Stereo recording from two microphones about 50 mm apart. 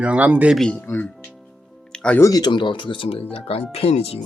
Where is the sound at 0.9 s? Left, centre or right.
Left.